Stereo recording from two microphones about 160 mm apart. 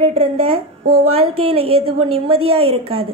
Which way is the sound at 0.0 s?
40° right (ahead or behind).